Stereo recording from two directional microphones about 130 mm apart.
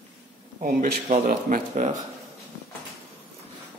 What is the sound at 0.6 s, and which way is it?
Speech, 90° right.